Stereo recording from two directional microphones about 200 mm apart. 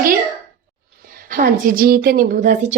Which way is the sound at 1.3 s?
45° right (ahead or behind).